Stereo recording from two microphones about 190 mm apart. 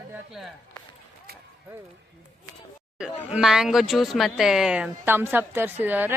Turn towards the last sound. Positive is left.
turn(degrees=-10)  # may be behind; listen again after turning